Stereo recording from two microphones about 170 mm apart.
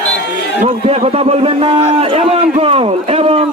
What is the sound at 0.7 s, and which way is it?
A man's voice, 35° right (ahead or behind).